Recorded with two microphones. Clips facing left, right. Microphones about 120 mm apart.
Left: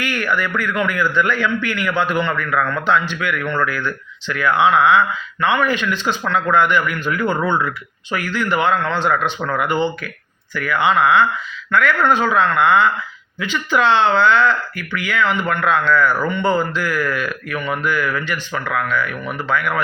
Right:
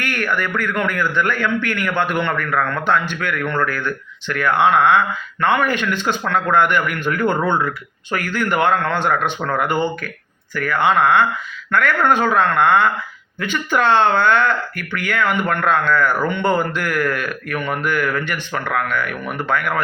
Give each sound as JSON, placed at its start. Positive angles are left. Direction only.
{"t": 0.0, "sound": "speech", "side_deg": -55}